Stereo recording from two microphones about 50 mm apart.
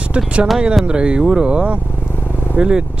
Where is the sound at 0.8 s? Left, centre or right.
Right.